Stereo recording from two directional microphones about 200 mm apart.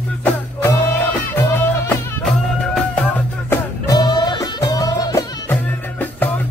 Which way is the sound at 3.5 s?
15° left (ahead or behind).